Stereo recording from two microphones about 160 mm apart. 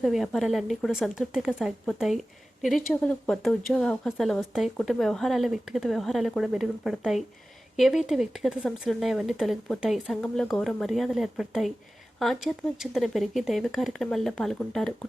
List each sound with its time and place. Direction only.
0.0 s speech: centre (ahead or behind)